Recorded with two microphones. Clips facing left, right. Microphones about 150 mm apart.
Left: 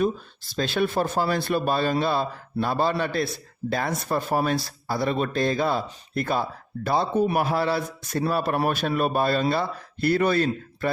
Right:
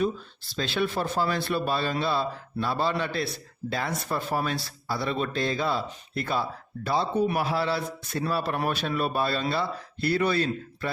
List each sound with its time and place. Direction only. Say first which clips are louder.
0.5 s speech: left 4 dB; 45° left (ahead or behind)